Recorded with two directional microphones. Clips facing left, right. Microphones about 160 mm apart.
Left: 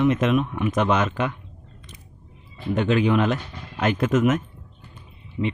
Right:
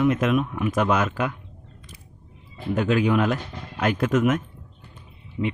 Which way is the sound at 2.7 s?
Centre (ahead or behind).